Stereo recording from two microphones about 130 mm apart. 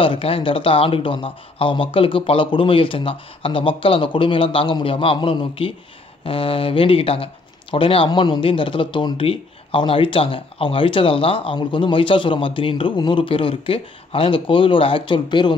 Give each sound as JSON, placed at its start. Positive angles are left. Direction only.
{"t": 0.0, "sound": "speech", "side_deg": 45}